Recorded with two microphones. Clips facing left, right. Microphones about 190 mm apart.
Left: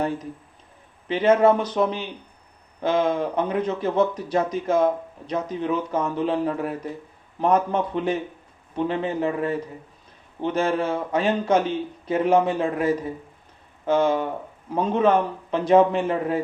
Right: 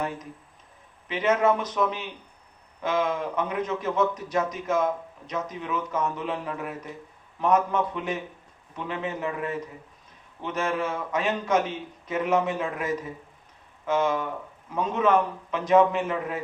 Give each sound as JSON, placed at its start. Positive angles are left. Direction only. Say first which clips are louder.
{"t": 0.0, "sound": "a man's voice", "louder": "left 6 dB", "side_deg": 30}